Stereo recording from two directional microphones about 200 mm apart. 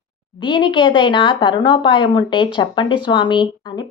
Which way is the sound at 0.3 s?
25° left (ahead or behind).